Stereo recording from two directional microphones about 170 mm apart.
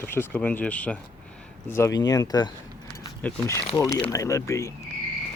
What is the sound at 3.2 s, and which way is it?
Speech, 10° left (ahead or behind).